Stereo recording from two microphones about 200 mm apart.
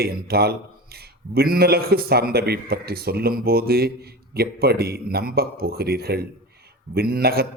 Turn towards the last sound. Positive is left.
turn(degrees=-50)  # may be behind; listen again after turning